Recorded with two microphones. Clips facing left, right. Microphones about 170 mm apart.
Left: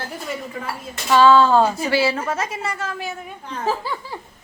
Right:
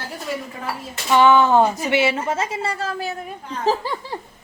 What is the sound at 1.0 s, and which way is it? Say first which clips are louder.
A woman's voice: left 1 dB; 20° right (ahead or behind).